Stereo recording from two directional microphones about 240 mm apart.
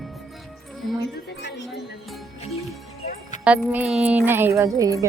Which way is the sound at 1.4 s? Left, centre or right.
Left.